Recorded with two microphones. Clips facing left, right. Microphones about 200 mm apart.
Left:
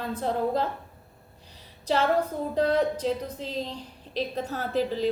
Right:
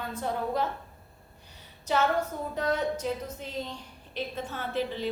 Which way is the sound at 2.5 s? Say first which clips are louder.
Left 5 dB; 30° left (ahead or behind).